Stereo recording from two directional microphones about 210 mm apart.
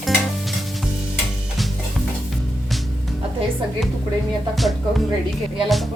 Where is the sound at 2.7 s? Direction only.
Centre (ahead or behind).